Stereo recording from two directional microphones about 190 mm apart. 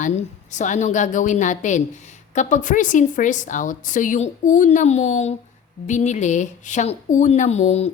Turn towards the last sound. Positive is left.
turn(degrees=35)  # may be behind; listen again after turning